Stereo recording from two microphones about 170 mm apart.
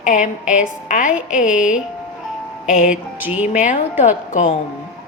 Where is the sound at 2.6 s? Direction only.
50° left (ahead or behind).